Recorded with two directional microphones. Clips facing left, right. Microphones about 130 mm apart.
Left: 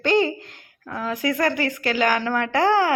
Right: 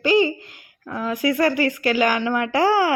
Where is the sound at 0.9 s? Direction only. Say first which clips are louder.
Right 3 dB; 15° right (ahead or behind).